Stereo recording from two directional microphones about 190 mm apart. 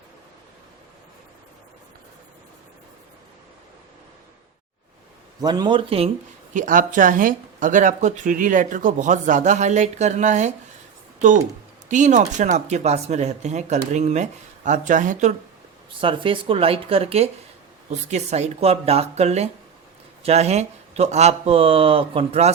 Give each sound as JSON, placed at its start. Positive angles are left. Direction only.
{"t": 5.4, "sound": "speech", "side_deg": -20}
{"t": 6.5, "sound": "speech", "side_deg": -45}
{"t": 11.9, "sound": "speech", "side_deg": -40}
{"t": 16.0, "sound": "speech", "side_deg": -25}